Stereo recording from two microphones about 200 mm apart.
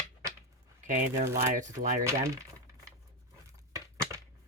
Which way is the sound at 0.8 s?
40° right (ahead or behind).